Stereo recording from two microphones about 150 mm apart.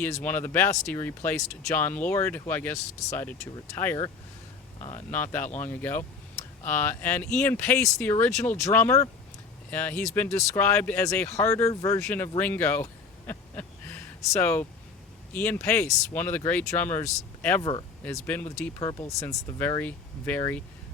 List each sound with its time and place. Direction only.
0.1 s speech: 15° left (ahead or behind)
4.8 s speech: 50° left (ahead or behind)
5.1 s speech: 15° left (ahead or behind)
8.1 s speech: 25° left (ahead or behind)
13.2 s a sound: 15° left (ahead or behind)
15.3 s speech: 15° left (ahead or behind)
17.6 s speech: 30° left (ahead or behind)
18.0 s speech: 10° left (ahead or behind)
18.8 s speech: 20° left (ahead or behind)